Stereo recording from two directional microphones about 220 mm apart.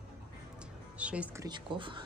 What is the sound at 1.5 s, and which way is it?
Speech, 20° right (ahead or behind).